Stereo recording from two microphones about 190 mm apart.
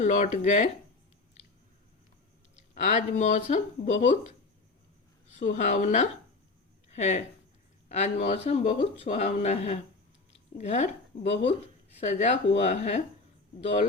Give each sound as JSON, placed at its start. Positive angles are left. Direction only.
{"t": 0.0, "sound": "speech", "side_deg": 40}
{"t": 2.7, "sound": "speech", "side_deg": 40}
{"t": 5.4, "sound": "speech", "side_deg": 40}